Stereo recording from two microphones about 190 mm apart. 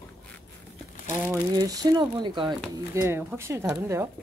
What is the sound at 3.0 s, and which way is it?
Speech, 10° right (ahead or behind).